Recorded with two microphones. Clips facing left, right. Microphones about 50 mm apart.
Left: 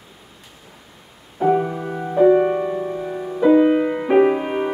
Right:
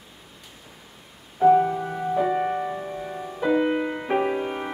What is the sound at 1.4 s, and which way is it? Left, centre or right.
Music, centre.